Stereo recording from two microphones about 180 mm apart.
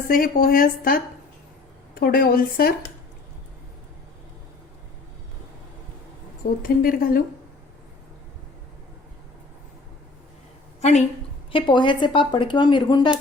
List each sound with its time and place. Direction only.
0.1 s speech: 55° left (ahead or behind)
6.6 s speech: 50° left (ahead or behind)
10.8 s a sound: 35° left (ahead or behind)
11.5 s speech: 25° left (ahead or behind)